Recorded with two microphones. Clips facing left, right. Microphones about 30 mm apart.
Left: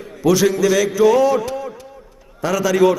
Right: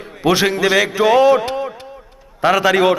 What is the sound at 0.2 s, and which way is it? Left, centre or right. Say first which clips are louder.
A man's voice: even; right.